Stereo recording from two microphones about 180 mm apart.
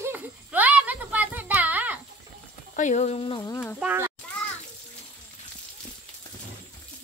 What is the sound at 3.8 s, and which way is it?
Speech, 10° right (ahead or behind).